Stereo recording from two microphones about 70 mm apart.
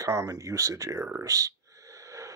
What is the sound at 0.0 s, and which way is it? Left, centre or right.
Speech, right.